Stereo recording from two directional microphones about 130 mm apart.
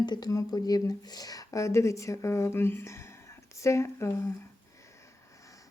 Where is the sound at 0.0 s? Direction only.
35° left (ahead or behind).